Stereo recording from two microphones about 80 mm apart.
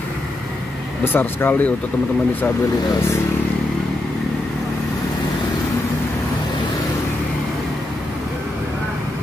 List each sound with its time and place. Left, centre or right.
1.0 s speech: left